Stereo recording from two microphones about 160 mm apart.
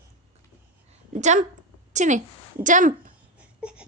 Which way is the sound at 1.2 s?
45° right (ahead or behind).